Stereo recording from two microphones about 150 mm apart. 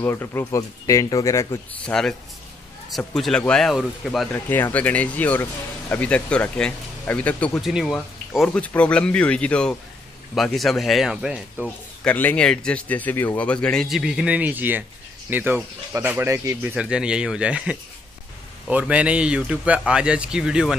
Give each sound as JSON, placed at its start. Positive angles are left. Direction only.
{"t": 0.0, "sound": "speech", "side_deg": 15}
{"t": 1.9, "sound": "speech", "side_deg": 5}
{"t": 3.2, "sound": "speech", "side_deg": 5}
{"t": 4.3, "sound": "speech", "side_deg": 15}
{"t": 11.6, "sound": "speech", "side_deg": 5}
{"t": 16.7, "sound": "speech", "side_deg": -5}